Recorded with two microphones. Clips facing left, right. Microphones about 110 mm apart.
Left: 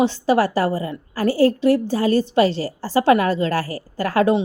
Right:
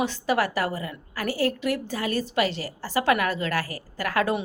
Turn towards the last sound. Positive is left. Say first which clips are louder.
# left 7 dB
turn(degrees=25)  # may be behind; listen again after turning